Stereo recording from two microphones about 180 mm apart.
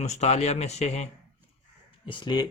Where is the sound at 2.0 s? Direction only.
25° left (ahead or behind).